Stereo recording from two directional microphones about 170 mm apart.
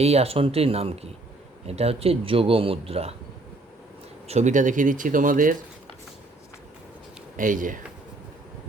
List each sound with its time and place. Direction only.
0.0 s a man's voice: 35° right (ahead or behind)
4.3 s speech: 45° right (ahead or behind)
7.3 s speech: 50° right (ahead or behind)